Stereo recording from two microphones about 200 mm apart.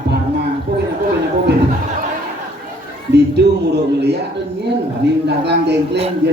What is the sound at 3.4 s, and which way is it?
Speech, 55° right (ahead or behind).